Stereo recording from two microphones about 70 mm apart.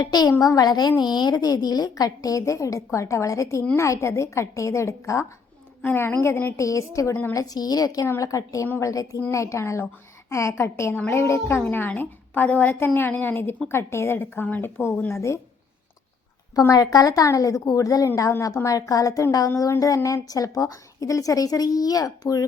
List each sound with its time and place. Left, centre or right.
0.0 s a woman's voice: left
5.8 s speech: left
6.6 s a woman's voice: left
7.3 s a woman's voice: left
8.2 s a woman's voice: left
11.6 s a woman's voice: left
15.1 s a woman's voice: left
16.6 s a woman's voice: left